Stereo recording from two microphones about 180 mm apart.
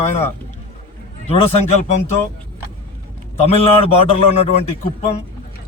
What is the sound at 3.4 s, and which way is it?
Speech, 35° left (ahead or behind).